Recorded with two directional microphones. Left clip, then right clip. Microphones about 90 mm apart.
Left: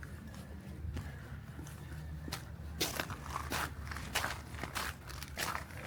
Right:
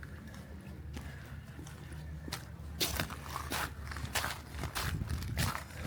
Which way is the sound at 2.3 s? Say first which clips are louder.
Right 1 dB; 10° right (ahead or behind).